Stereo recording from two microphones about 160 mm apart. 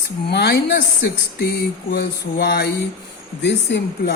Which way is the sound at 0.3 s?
90° left.